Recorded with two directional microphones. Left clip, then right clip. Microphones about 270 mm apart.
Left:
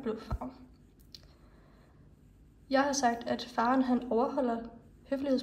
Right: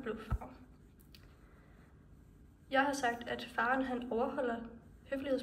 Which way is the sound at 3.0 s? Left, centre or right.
Centre.